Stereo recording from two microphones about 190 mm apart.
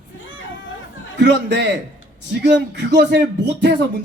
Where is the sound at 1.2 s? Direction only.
65° right (ahead or behind).